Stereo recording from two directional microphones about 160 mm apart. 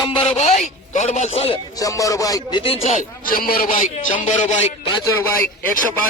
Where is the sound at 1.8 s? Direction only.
20° left (ahead or behind); by 2.9 s 35° left (ahead or behind).